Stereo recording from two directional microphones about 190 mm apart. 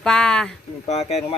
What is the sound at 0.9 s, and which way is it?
Speech, 35° left (ahead or behind).